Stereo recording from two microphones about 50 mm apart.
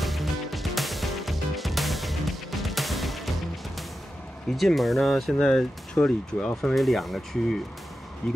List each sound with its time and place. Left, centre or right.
0.0 s music: centre
4.6 s speech: centre
5.9 s speech: centre
6.7 s speech: centre